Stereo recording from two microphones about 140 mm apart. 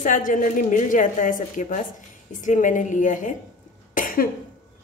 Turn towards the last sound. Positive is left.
turn(degrees=75)  # may be behind; listen again after turning